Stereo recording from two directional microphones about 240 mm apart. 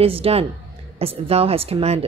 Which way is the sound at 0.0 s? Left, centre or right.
Right.